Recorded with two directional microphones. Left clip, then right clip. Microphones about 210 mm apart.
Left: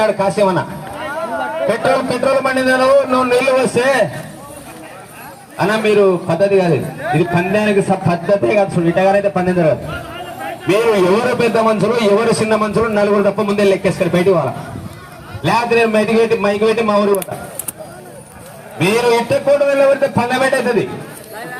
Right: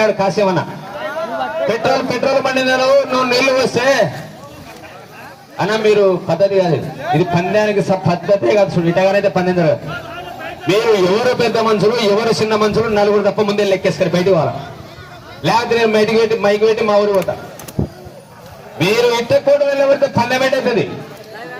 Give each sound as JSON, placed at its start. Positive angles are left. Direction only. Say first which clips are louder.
{"t": 0.0, "sound": "a man's voice", "louder": "even", "side_deg": -15}
{"t": 0.9, "sound": "a sound", "louder": "even", "side_deg": -50}
{"t": 1.6, "sound": "a man's voice", "louder": "left 1 dB", "side_deg": -25}
{"t": 5.5, "sound": "a man's voice", "louder": "even", "side_deg": -50}
{"t": 15.4, "sound": "a man's voice", "louder": "even", "side_deg": -50}
{"t": 18.8, "sound": "a man's voice", "louder": "even", "side_deg": -50}